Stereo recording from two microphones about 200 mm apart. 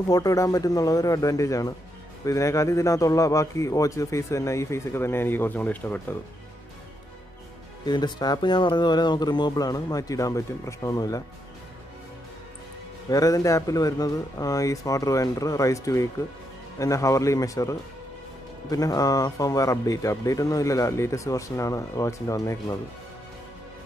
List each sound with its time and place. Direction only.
0.1 s speech: 15° left (ahead or behind)
7.8 s speech: 20° left (ahead or behind)
13.1 s speech: 15° left (ahead or behind)